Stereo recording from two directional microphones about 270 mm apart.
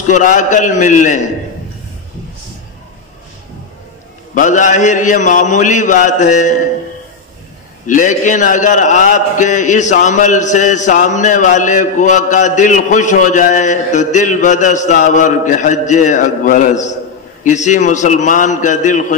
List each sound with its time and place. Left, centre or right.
0.1 s a man's voice: left
4.4 s a man's voice: left
7.8 s a man's voice: left